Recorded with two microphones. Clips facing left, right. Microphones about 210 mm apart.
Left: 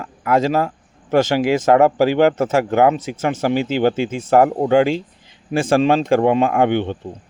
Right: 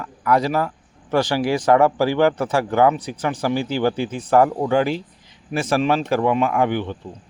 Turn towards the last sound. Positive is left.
turn(degrees=25)  # may be behind; listen again after turning